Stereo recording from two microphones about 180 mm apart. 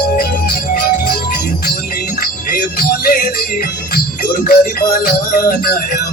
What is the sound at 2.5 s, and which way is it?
Music, 55° left (ahead or behind).